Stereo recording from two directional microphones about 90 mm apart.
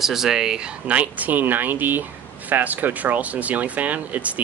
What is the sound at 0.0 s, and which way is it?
Speech, 5° right (ahead or behind).